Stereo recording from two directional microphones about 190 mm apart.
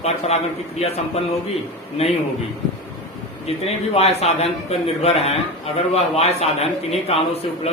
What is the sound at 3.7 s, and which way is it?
A man's voice, 35° left (ahead or behind).